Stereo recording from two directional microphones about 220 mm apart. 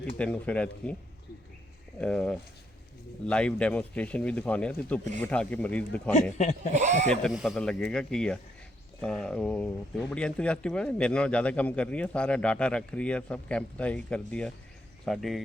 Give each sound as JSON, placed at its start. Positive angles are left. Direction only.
{"t": 0.2, "sound": "speech", "side_deg": 5}
{"t": 2.0, "sound": "speech", "side_deg": 5}
{"t": 6.3, "sound": "speech", "side_deg": 35}
{"t": 6.7, "sound": "speech", "side_deg": -30}
{"t": 7.1, "sound": "speech", "side_deg": 0}